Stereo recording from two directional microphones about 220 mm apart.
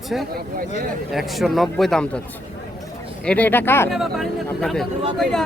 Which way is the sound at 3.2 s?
5° left (ahead or behind).